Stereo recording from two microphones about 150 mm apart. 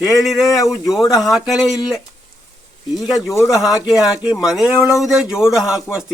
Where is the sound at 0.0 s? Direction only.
Centre (ahead or behind).